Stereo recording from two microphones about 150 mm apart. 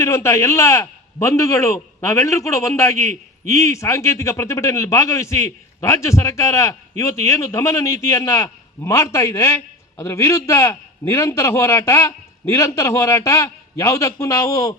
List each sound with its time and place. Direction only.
0.0 s speech: 20° left (ahead or behind)